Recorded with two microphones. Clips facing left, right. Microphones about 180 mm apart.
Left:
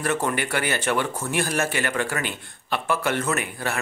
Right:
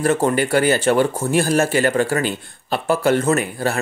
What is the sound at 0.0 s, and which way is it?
Speech, 30° right (ahead or behind).